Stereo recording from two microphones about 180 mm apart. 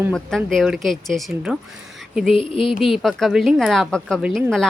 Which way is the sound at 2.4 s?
30° left (ahead or behind).